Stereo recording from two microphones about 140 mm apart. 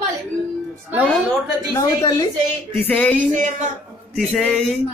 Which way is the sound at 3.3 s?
65° right (ahead or behind).